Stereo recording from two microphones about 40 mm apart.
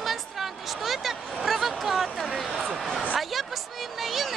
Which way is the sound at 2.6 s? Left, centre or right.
Centre.